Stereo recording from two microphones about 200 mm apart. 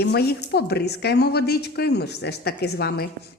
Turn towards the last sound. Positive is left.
turn(degrees=55)  # may be behind; listen again after turning